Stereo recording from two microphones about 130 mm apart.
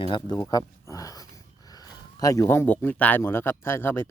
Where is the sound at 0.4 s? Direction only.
25° left (ahead or behind).